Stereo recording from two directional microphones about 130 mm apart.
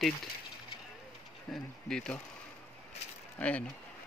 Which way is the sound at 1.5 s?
5° left (ahead or behind).